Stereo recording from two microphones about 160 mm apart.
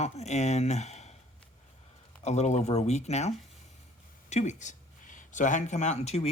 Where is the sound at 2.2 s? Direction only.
45° left (ahead or behind).